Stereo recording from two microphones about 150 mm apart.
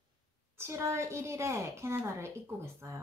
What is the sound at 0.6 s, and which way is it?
A woman's voice, 20° right (ahead or behind).